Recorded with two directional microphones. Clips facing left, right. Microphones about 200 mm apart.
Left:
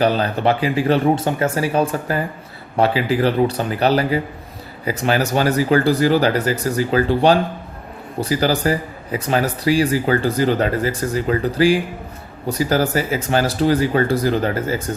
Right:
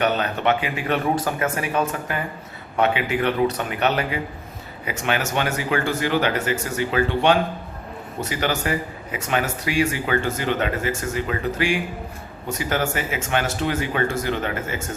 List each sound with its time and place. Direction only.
0.0 s speech: 35° left (ahead or behind)